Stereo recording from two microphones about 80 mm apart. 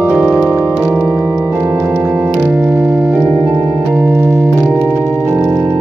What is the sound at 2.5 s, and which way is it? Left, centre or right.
Organ, right.